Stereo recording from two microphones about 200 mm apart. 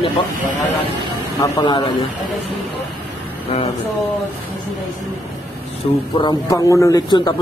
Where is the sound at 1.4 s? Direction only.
20° left (ahead or behind).